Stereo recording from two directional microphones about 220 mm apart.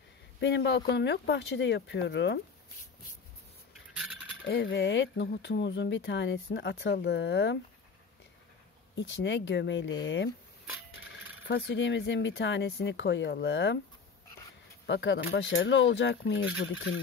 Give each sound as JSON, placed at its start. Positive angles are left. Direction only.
{"t": 0.4, "sound": "speech", "side_deg": 50}
{"t": 4.5, "sound": "speech", "side_deg": 45}
{"t": 8.9, "sound": "speech", "side_deg": 55}
{"t": 11.4, "sound": "speech", "side_deg": 50}
{"t": 14.9, "sound": "speech", "side_deg": 55}